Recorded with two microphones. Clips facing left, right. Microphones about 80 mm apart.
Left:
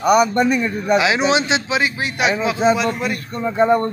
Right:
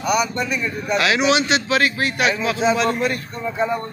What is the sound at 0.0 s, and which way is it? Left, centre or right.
Speech, left.